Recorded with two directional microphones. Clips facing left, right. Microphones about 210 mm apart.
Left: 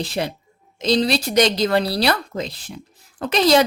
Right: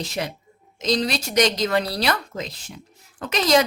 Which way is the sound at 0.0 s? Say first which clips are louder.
Left 4 dB; 30° left (ahead or behind).